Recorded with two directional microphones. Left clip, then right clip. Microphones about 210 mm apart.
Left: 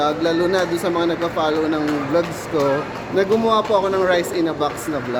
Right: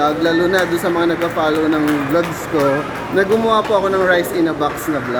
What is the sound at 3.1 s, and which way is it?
Speech, centre (ahead or behind).